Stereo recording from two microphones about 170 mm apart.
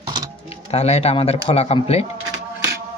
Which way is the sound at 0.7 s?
35° left (ahead or behind).